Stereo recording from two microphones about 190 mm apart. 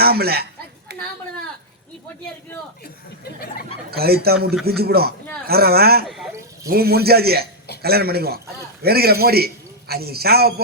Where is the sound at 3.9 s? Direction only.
55° right (ahead or behind).